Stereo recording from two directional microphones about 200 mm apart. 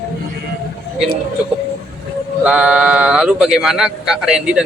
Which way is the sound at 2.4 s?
5° right (ahead or behind).